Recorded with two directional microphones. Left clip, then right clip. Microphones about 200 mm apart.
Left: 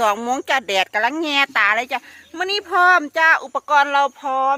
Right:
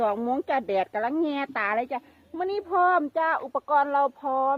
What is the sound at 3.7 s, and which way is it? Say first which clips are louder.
Speech: left 7 dB; 10° left (ahead or behind).